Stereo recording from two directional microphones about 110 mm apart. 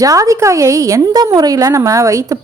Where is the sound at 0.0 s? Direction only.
30° right (ahead or behind).